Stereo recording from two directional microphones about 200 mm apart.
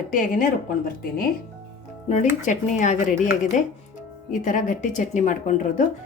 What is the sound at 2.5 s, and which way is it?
Speech, 40° left (ahead or behind).